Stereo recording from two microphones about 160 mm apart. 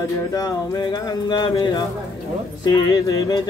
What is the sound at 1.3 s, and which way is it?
Speech, 25° left (ahead or behind).